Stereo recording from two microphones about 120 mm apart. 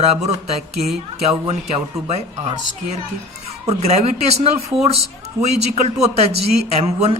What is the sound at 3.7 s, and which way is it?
Speech, 65° right (ahead or behind).